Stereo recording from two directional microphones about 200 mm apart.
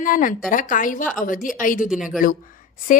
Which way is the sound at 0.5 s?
40° left (ahead or behind).